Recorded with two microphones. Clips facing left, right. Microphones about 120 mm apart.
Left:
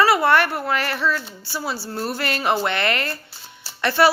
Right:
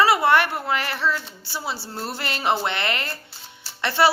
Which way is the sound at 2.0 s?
25° right (ahead or behind).